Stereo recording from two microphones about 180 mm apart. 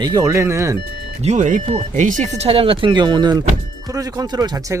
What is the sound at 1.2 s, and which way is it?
A woman's voice, 40° right (ahead or behind).